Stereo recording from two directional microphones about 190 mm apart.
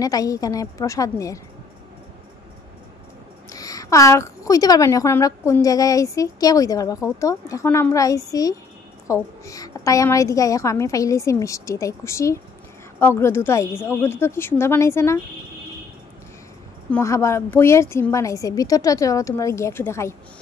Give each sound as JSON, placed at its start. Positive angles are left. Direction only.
{"t": 0.0, "sound": "a woman's voice", "side_deg": 20}
{"t": 3.4, "sound": "a woman's voice", "side_deg": 20}
{"t": 16.9, "sound": "a woman's voice", "side_deg": 15}